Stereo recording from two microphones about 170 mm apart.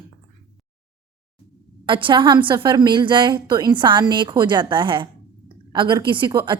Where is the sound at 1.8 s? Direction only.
30° right (ahead or behind).